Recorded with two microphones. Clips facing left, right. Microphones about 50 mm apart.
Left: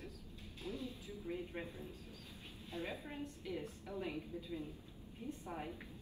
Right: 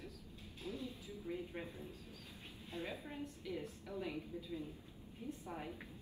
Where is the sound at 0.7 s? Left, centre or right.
Left.